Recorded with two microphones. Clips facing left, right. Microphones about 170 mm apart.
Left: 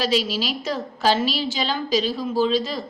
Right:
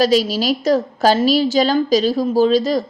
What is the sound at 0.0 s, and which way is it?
A woman's voice, 40° right (ahead or behind).